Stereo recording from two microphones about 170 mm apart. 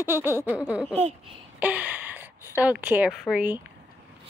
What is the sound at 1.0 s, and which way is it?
Speech, 35° right (ahead or behind).